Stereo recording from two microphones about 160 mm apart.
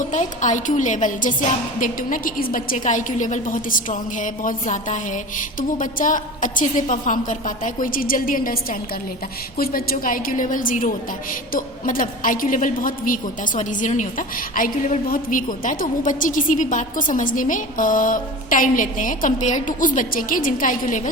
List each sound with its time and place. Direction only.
0.0 s a woman's voice: 50° left (ahead or behind)
9.6 s a woman's voice: 65° left (ahead or behind)